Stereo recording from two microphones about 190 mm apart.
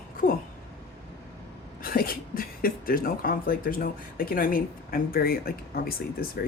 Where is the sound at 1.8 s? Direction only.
50° left (ahead or behind).